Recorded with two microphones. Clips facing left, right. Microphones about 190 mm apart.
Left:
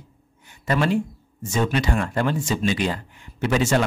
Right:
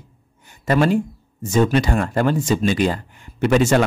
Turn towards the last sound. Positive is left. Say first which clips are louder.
# right 5 dB
turn(degrees=-50)  # may be behind; listen again after turning